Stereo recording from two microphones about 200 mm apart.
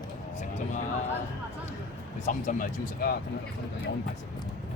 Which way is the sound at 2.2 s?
40° left (ahead or behind).